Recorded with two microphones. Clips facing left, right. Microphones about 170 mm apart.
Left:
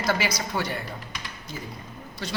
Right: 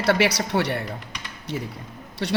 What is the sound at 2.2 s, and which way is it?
Speech, 70° right (ahead or behind).